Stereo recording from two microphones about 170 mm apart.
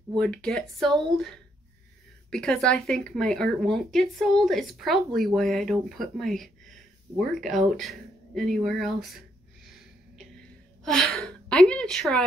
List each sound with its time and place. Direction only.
0.2 s speech: 5° left (ahead or behind)
9.7 s gasp: centre (ahead or behind)